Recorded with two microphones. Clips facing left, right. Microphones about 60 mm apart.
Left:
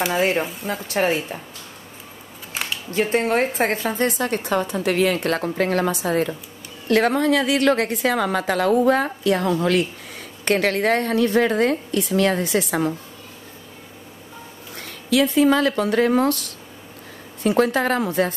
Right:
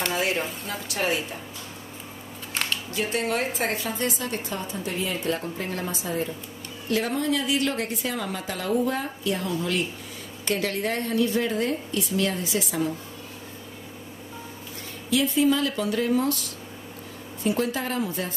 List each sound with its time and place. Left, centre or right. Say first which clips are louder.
0.1 s a woman's voice: left 6 dB; left
2.5 s a sound: left 1 dB; centre
2.9 s a woman's voice: left 8 dB; left
4.2 s a woman's voice: left 9 dB; left
15.0 s a woman's voice: left 5 dB; left
17.4 s a woman's voice: left 7 dB; left